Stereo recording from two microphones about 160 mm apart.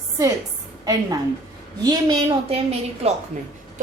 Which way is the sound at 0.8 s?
25° right (ahead or behind).